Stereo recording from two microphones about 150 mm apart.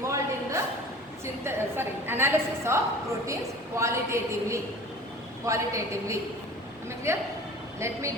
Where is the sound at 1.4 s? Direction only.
15° right (ahead or behind).